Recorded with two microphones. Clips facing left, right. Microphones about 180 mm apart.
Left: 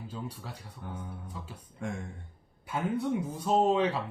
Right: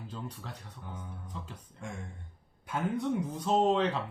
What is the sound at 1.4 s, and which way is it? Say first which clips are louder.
Speech: right 4 dB; 5° left (ahead or behind).